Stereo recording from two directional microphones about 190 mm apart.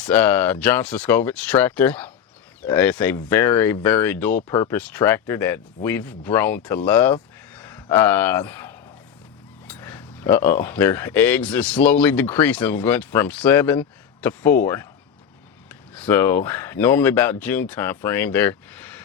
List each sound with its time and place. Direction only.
0.0 s speech: 10° left (ahead or behind)